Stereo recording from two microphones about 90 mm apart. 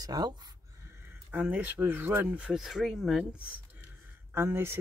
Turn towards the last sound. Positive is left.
turn(degrees=-30)  # may be behind; listen again after turning